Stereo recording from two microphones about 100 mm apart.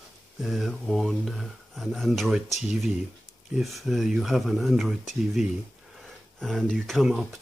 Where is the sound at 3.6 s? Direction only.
Centre (ahead or behind).